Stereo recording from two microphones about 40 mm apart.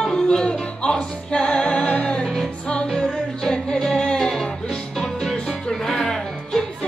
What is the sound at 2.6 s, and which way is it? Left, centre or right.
Music, left.